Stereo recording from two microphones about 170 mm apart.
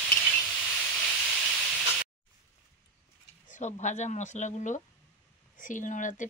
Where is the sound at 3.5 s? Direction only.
45° left (ahead or behind).